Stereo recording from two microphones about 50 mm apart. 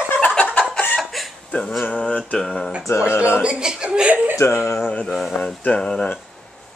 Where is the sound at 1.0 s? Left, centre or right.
Centre.